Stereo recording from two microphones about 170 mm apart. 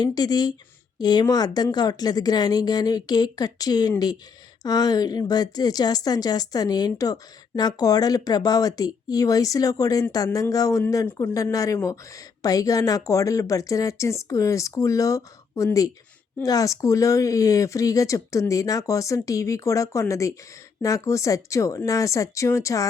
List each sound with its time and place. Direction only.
0.0 s a woman's voice: 25° left (ahead or behind)